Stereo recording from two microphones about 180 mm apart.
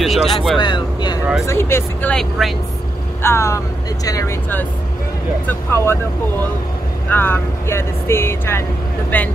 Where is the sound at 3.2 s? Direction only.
15° left (ahead or behind).